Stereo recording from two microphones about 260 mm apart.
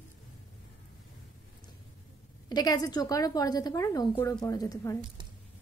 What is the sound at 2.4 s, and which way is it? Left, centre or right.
A woman's voice, centre.